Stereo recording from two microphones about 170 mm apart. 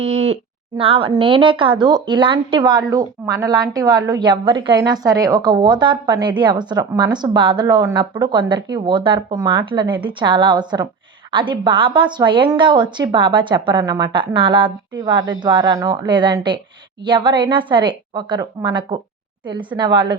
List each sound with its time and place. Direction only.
0.0 s speech: 40° right (ahead or behind)